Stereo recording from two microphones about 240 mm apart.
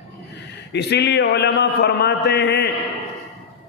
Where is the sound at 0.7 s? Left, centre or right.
Left.